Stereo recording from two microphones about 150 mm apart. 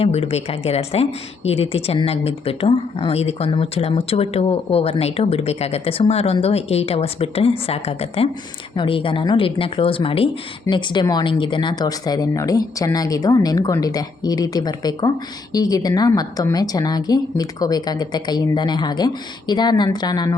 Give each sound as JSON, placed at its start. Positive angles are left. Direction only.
{"t": 0.0, "sound": "a woman's voice", "side_deg": 40}